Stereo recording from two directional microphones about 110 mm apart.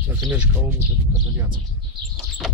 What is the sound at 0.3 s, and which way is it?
Speech, 15° right (ahead or behind).